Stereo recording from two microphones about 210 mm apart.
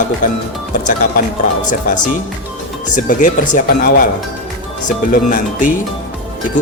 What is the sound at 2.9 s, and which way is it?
Speech, 35° left (ahead or behind).